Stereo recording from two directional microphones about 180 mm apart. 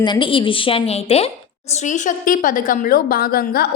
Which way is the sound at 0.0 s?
25° left (ahead or behind).